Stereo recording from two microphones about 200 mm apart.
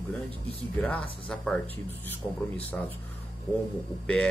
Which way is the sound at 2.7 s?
10° left (ahead or behind).